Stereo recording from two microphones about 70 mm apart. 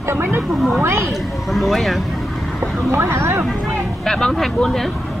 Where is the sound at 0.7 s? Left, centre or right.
Right.